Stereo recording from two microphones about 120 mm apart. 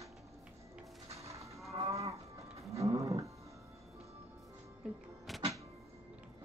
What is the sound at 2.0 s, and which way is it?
Livestock, 25° right (ahead or behind).